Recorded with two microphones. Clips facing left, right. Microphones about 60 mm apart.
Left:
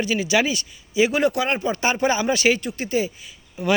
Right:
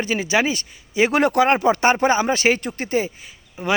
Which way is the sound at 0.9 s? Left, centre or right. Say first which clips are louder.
Right 1 dB; right.